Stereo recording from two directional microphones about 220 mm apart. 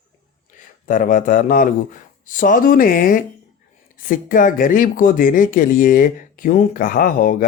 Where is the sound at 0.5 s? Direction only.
35° left (ahead or behind).